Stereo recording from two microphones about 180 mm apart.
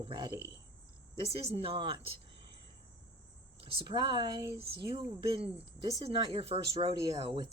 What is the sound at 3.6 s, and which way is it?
Speech, 30° right (ahead or behind).